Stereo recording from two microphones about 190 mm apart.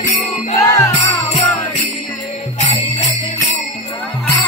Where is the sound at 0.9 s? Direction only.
35° left (ahead or behind).